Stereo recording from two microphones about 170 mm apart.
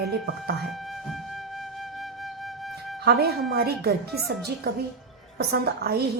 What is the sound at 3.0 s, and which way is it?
Speech, 70° right (ahead or behind).